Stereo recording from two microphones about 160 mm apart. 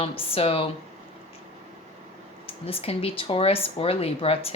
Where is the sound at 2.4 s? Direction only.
35° left (ahead or behind).